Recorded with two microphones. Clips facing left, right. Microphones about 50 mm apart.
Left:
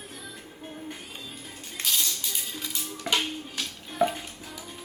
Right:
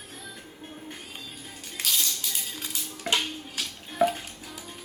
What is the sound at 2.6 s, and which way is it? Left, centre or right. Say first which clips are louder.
Music: even; right.